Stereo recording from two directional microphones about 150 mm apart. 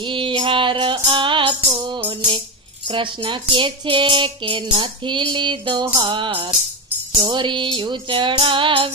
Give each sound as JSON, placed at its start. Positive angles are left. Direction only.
{"t": 0.0, "sound": "music", "side_deg": -35}